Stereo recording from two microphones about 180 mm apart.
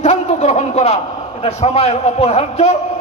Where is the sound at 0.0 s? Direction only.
40° left (ahead or behind).